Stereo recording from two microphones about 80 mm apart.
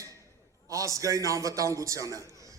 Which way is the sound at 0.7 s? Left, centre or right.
Right.